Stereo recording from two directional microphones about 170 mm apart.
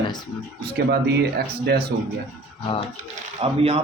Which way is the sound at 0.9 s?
75° right (ahead or behind).